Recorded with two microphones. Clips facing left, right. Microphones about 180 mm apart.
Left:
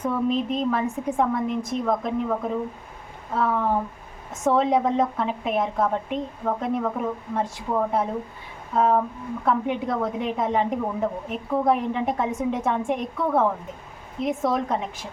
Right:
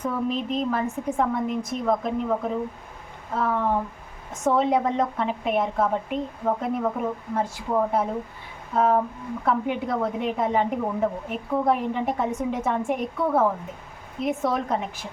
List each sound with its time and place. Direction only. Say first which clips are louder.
0.0 s a woman's voice: left 3 dB; centre (ahead or behind)
8.7 s a sound: even; centre (ahead or behind)
9.4 s a woman's voice: left 1 dB; centre (ahead or behind)